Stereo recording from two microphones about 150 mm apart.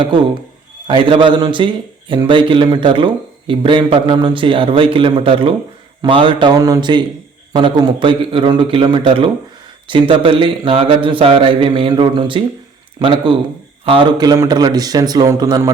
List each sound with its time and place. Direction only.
0.9 s a man's voice: 35° right (ahead or behind)